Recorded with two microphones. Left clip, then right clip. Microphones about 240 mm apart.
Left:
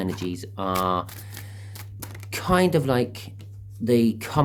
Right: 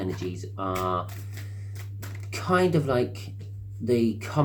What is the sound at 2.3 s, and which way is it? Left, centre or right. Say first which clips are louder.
Speech: left 2 dB; left.